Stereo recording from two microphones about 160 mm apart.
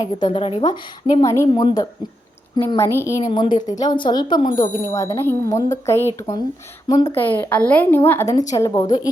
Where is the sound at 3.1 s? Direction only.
25° left (ahead or behind).